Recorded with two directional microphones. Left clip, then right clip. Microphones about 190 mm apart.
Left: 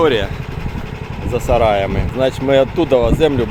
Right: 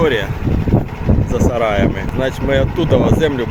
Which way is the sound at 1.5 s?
10° left (ahead or behind).